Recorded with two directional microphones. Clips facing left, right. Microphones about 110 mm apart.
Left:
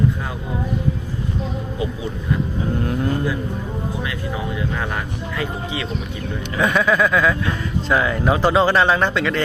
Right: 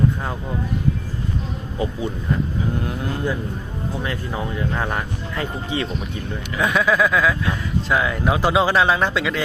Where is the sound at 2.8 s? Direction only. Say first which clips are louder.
Left 4 dB; centre (ahead or behind).